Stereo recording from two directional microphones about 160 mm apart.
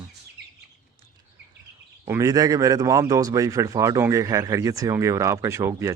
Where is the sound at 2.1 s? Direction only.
20° right (ahead or behind).